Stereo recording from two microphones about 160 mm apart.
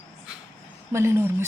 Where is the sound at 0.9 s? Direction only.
15° right (ahead or behind).